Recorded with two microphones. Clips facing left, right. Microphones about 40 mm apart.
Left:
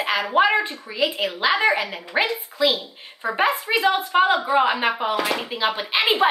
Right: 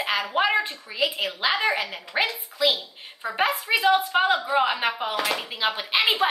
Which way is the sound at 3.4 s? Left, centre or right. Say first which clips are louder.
Left 2 dB; centre.